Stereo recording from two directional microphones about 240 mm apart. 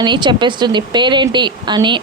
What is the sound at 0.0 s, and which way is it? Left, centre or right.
A woman's voice, centre.